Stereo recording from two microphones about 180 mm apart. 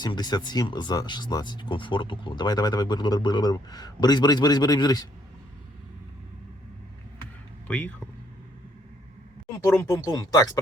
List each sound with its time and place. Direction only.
0.0 s speech: 25° left (ahead or behind)
7.7 s speech: 5° left (ahead or behind)
9.6 s speech: 15° left (ahead or behind)